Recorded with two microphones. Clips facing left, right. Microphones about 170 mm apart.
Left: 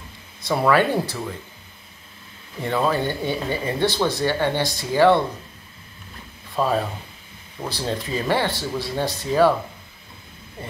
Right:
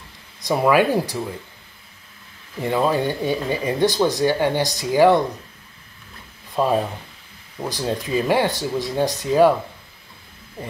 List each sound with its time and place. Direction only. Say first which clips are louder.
0.4 s speech: right 2 dB; 15° right (ahead or behind)
2.6 s speech: right 2 dB; 15° right (ahead or behind)
6.5 s speech: right 2 dB; 20° right (ahead or behind)